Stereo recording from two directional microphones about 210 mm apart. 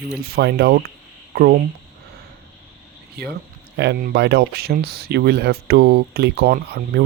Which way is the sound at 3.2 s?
50° right (ahead or behind).